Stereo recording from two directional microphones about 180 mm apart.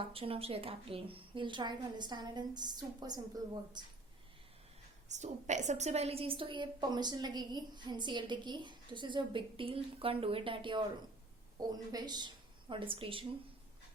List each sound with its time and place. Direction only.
0.0 s a woman's voice: 30° right (ahead or behind)
5.0 s a woman's voice: 40° right (ahead or behind)
11.9 s a woman's voice: 20° right (ahead or behind)